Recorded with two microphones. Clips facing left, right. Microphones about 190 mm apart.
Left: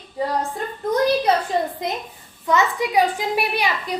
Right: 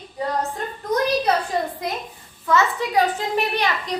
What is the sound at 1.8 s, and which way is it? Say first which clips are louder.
A woman's voice: left 1 dB; 20° left (ahead or behind).